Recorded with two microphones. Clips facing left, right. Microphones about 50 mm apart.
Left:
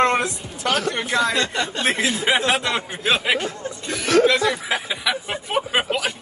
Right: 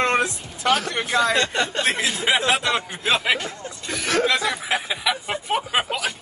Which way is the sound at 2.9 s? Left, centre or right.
Left.